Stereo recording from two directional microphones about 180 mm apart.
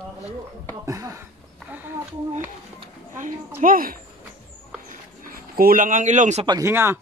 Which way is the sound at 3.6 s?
50° right (ahead or behind).